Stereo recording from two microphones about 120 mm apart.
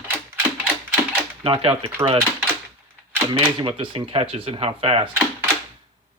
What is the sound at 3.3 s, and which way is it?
Speech, 50° right (ahead or behind).